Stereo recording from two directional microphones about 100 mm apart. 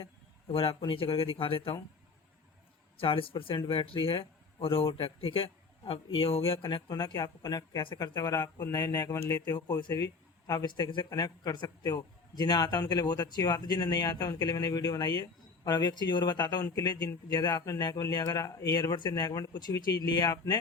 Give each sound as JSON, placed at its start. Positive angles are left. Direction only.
{"t": 0.5, "sound": "speech", "side_deg": 65}
{"t": 3.0, "sound": "speech", "side_deg": 65}
{"t": 6.7, "sound": "speech", "side_deg": 45}
{"t": 7.9, "sound": "speech", "side_deg": 45}
{"t": 17.1, "sound": "a man's voice", "side_deg": 30}
{"t": 17.4, "sound": "speech", "side_deg": 45}